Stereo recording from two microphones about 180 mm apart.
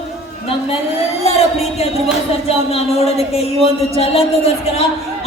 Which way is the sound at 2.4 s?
35° left (ahead or behind).